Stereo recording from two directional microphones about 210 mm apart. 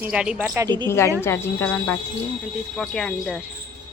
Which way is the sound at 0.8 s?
10° left (ahead or behind).